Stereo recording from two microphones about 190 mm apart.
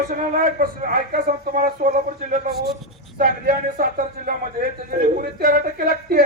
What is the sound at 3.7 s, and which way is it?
Speech, 50° right (ahead or behind).